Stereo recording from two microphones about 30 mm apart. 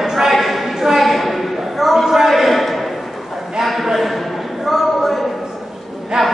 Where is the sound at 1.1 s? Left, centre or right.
Centre.